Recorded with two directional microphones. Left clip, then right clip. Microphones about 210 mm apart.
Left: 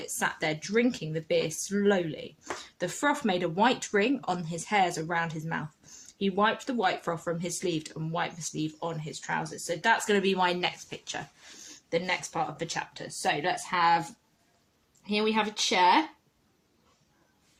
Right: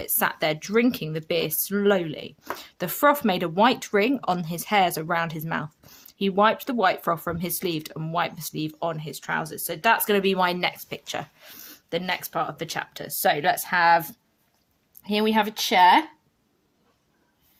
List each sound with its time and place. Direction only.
0.0 s speech: 35° right (ahead or behind); by 14.0 s 55° right (ahead or behind)
15.0 s speech: 55° right (ahead or behind)